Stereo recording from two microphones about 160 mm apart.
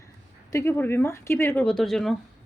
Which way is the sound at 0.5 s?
15° left (ahead or behind).